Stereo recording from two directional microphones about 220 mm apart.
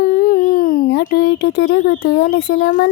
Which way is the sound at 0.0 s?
45° left (ahead or behind).